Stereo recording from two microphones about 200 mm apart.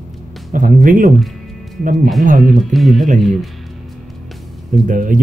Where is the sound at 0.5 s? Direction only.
40° right (ahead or behind).